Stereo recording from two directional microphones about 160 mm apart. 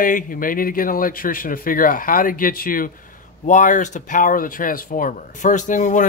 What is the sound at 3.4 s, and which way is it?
Speech, 50° left (ahead or behind).